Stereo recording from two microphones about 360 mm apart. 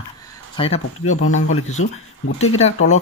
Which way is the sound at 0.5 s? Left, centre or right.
Centre.